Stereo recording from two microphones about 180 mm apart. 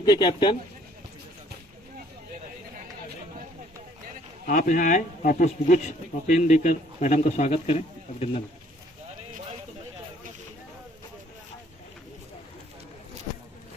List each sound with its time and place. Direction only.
0.0 s speech: 25° left (ahead or behind)
4.4 s speech: 50° left (ahead or behind)